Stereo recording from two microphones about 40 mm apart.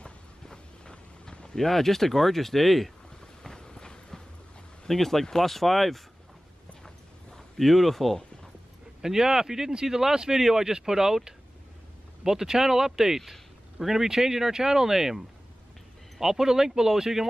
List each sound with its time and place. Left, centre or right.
0.0 s a sound: left
1.5 s speech: centre
3.5 s train: centre
4.8 s speech: centre
7.3 s speech: centre
9.0 s speech: centre